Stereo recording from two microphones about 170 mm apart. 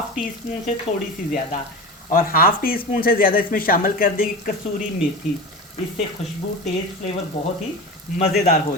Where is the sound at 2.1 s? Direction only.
60° left (ahead or behind).